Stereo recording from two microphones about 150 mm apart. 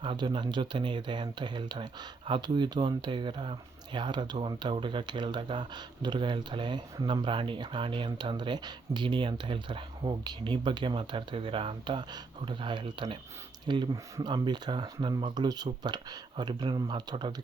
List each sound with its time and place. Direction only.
0.0 s speech: 30° right (ahead or behind)